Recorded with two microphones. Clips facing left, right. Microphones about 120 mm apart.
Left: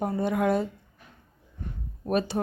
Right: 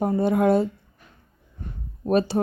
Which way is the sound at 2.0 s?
30° right (ahead or behind).